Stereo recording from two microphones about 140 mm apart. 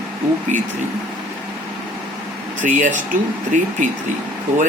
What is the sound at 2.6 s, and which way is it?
Speech, 65° right (ahead or behind).